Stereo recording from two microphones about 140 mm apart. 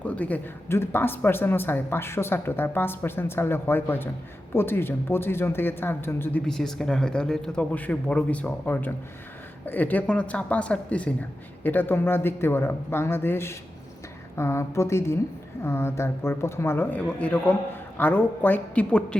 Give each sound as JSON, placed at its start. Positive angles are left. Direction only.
{"t": 0.0, "sound": "speech", "side_deg": 10}
{"t": 6.4, "sound": "a woman's voice", "side_deg": 5}